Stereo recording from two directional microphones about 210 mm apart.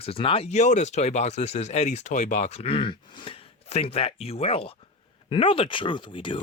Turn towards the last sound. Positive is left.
turn(degrees=25)  # may be behind; listen again after turning